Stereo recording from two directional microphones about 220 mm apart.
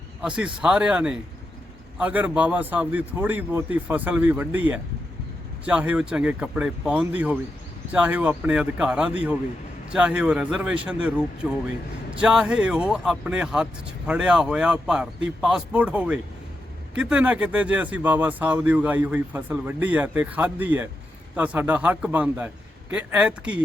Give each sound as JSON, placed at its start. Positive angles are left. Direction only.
{"t": 0.2, "sound": "a man's voice", "side_deg": -5}